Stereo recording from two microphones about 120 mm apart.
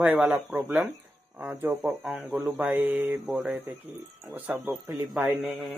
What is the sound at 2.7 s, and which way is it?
Speech, 15° right (ahead or behind).